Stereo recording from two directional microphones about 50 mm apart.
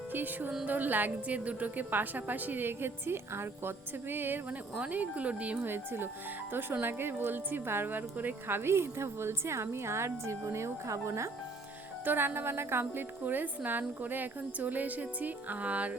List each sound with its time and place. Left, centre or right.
0.1 s a woman's voice: right
4.8 s speech: right
5.6 s a woman's voice: right
12.0 s a woman's voice: right
12.8 s a woman's voice: right